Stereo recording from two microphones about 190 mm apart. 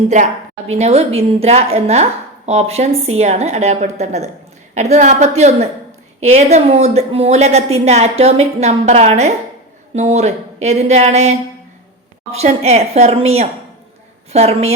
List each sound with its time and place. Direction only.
0.7 s a woman's voice: 35° right (ahead or behind)